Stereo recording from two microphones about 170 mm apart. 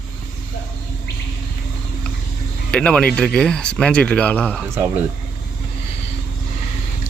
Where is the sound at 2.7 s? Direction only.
5° left (ahead or behind).